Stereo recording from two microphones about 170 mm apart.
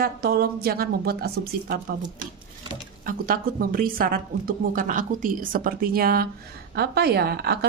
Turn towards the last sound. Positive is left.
turn(degrees=-70)  # may be behind; listen again after turning